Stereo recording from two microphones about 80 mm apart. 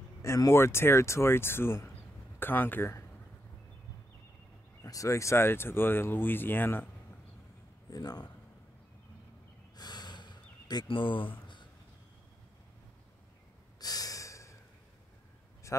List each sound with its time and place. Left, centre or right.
0.5 s speech: left
4.8 s speech: left
7.9 s speech: left
9.8 s gasp: left
13.7 s breathing: left